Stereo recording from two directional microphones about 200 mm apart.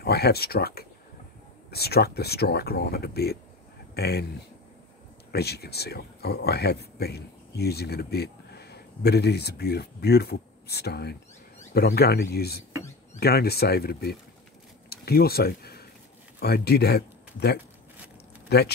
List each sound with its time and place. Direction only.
0.0 s speech: 50° left (ahead or behind)
5.3 s a man's voice: 55° left (ahead or behind)